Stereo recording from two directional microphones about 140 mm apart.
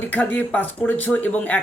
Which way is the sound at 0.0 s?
10° left (ahead or behind).